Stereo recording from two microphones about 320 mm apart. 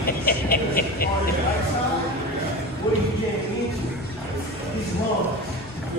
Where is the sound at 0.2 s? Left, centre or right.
Left.